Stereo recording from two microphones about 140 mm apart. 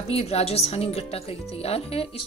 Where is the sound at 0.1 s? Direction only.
45° left (ahead or behind).